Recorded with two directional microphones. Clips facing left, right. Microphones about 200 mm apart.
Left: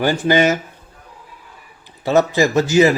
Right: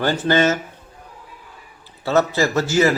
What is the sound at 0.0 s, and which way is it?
Speech, 10° left (ahead or behind).